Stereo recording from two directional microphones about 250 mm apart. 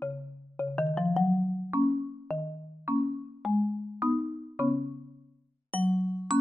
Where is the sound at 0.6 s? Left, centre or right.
Centre.